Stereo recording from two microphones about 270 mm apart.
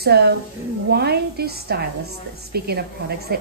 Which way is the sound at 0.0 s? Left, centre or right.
Right.